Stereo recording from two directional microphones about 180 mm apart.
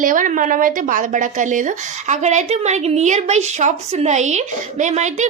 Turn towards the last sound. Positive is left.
turn(degrees=-40)  # may be behind; listen again after turning